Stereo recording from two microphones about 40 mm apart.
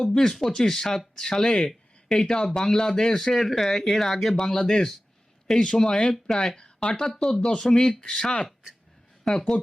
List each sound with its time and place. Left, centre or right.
0.0 s speech: centre
9.3 s speech: centre